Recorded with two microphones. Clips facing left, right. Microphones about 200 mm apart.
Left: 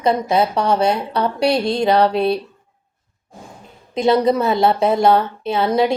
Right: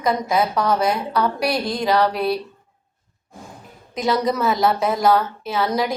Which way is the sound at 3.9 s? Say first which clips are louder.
Left 5 dB; 25° left (ahead or behind).